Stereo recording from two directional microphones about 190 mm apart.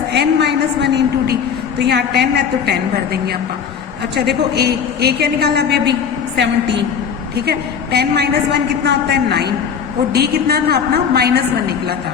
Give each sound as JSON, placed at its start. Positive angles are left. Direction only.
{"t": 0.1, "sound": "a woman's voice", "side_deg": -60}
{"t": 7.9, "sound": "a woman's voice", "side_deg": -60}